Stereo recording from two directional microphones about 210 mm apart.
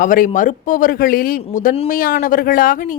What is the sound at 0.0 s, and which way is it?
Speech, 40° left (ahead or behind).